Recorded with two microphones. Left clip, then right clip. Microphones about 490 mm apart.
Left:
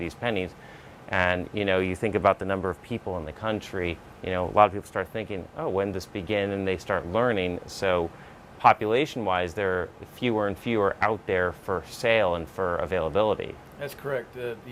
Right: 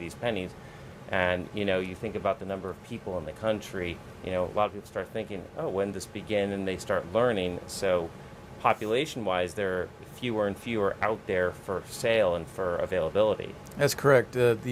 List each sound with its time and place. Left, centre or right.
0.0 s speech: left
13.7 s speech: right